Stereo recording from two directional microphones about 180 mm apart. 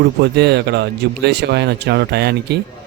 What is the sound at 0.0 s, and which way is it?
Speech, 65° right (ahead or behind).